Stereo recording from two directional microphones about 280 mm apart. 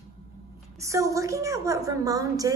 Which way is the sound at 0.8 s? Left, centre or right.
Centre.